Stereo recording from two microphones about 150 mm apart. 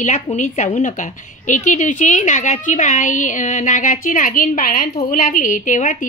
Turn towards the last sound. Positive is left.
turn(degrees=60)  # may be behind; listen again after turning